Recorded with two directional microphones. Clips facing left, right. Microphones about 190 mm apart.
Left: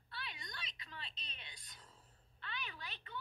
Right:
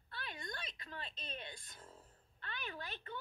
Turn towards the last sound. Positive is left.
turn(degrees=-50)  # may be behind; listen again after turning